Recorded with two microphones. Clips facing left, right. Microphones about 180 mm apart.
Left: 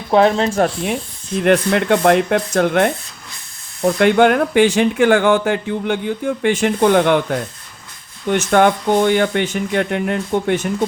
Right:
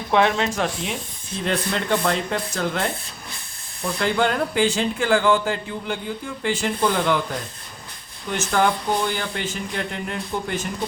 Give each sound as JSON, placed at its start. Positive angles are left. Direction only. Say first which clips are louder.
{"t": 0.1, "sound": "speech", "louder": "left 6 dB", "side_deg": 35}
{"t": 0.5, "sound": "speech", "louder": "left 8 dB", "side_deg": 50}
{"t": 1.4, "sound": "speech", "louder": "left 10 dB", "side_deg": 65}